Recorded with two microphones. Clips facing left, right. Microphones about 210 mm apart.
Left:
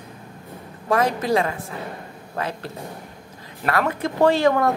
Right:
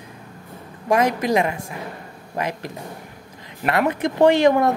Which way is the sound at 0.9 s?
15° right (ahead or behind).